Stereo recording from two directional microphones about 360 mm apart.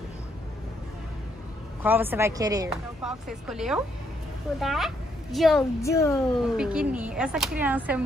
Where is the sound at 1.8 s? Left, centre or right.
Centre.